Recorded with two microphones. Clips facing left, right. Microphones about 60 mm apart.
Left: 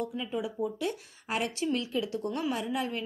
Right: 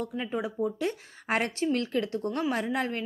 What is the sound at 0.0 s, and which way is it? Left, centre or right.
A woman's voice, right.